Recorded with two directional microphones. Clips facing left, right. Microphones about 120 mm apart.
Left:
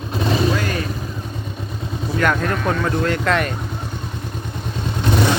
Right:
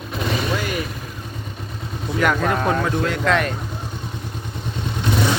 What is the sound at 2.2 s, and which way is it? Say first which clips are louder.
Speech: right 1 dB; 10° right (ahead or behind).